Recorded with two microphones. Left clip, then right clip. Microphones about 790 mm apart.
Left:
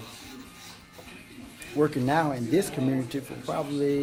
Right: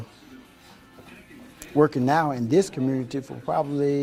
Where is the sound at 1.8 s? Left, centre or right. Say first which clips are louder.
Right 4 dB; right.